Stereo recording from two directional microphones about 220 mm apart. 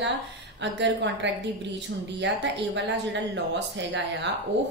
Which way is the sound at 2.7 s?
50° right (ahead or behind).